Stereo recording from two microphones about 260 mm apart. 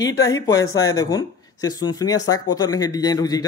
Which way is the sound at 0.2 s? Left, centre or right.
Centre.